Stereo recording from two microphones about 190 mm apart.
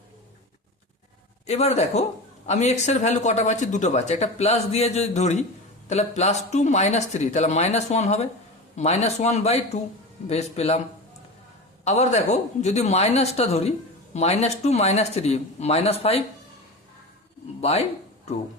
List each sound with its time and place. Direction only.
1.5 s speech: 35° left (ahead or behind)
11.9 s speech: 35° left (ahead or behind)
17.6 s speech: 35° left (ahead or behind)